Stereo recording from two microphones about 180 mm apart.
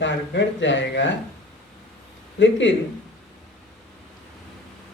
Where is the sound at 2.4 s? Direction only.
85° left.